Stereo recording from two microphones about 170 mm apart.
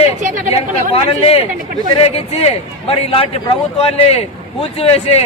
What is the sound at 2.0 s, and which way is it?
Speech, 35° left (ahead or behind).